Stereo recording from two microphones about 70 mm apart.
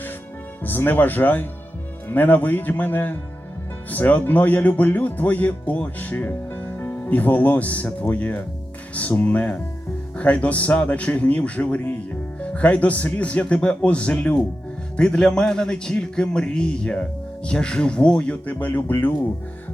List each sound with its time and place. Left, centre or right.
0.6 s a man's voice: left